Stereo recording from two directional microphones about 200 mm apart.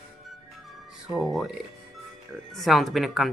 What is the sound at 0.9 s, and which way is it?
Speech, centre (ahead or behind).